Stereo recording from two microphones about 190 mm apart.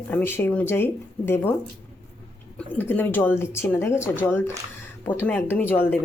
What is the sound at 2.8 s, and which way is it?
Speech, 10° left (ahead or behind).